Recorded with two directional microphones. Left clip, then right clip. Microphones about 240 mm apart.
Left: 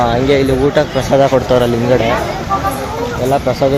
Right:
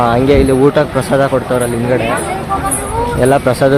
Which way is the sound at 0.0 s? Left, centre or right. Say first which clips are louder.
Right 2 dB; centre.